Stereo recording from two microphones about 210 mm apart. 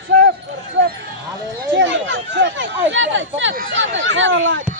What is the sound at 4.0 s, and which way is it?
Speech, 65° right (ahead or behind).